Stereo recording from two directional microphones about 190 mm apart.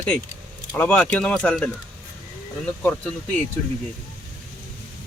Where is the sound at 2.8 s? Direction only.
5° left (ahead or behind).